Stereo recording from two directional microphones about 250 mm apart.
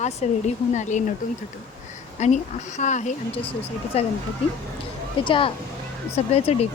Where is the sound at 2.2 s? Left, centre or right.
Left.